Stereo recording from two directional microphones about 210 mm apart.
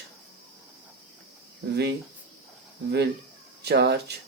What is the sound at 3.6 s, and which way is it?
Speech, 50° right (ahead or behind).